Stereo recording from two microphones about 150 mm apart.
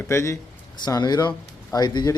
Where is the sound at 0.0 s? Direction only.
20° left (ahead or behind).